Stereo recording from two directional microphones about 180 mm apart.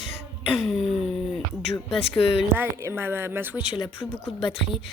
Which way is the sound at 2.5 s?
15° right (ahead or behind).